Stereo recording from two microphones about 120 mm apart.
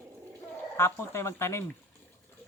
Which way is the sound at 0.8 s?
20° left (ahead or behind).